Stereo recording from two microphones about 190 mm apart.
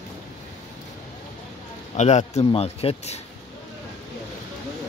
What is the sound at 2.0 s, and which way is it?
Speech, 35° left (ahead or behind).